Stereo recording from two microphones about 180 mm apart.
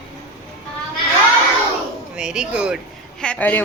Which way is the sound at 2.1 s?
5° right (ahead or behind).